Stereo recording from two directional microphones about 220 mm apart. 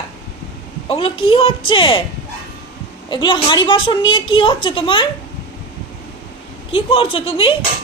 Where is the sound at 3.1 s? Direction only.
20° left (ahead or behind).